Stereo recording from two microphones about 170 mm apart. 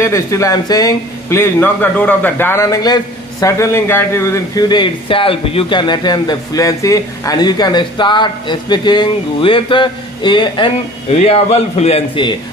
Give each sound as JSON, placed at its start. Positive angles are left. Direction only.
{"t": 0.0, "sound": "speech", "side_deg": 15}